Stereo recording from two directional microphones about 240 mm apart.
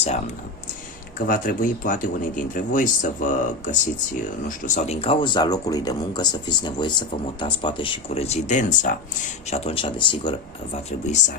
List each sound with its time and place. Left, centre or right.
1.3 s speech: left